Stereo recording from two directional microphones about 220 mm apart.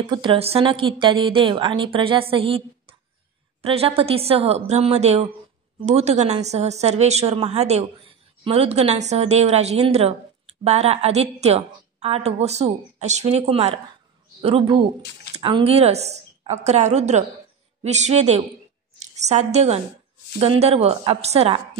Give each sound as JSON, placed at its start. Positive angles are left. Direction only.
{"t": 0.0, "sound": "a woman's voice", "side_deg": -20}